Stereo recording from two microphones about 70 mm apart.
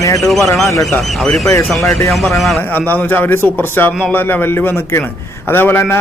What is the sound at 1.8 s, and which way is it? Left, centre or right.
Speech, left.